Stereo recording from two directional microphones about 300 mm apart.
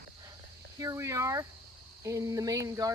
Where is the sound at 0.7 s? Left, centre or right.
Centre.